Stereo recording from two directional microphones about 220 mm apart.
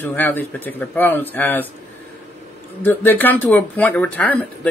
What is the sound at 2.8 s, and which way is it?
Speech, 10° left (ahead or behind).